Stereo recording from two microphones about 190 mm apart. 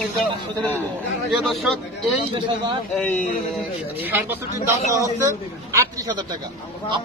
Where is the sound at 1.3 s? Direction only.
Centre (ahead or behind).